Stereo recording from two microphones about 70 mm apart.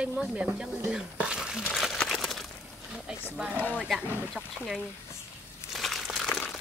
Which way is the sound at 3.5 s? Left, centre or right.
Left.